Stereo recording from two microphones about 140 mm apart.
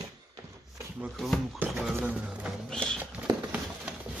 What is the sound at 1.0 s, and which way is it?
Speech, centre (ahead or behind).